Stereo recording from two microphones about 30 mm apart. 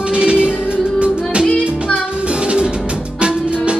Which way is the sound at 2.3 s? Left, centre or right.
Right.